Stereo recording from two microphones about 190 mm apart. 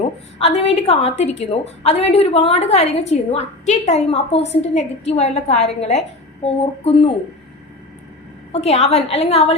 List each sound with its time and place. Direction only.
0.3 s a woman's voice: 30° left (ahead or behind)
8.5 s a woman's voice: 35° left (ahead or behind)